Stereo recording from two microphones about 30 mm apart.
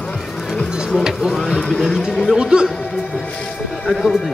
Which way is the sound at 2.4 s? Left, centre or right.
Right.